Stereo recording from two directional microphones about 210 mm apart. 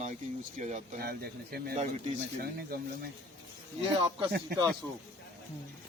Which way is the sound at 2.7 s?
45° right (ahead or behind).